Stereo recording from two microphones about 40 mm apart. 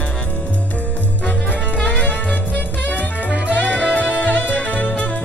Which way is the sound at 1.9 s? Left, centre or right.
Left.